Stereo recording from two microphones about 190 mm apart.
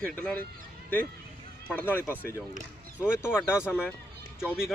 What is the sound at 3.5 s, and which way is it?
Speech, 5° right (ahead or behind).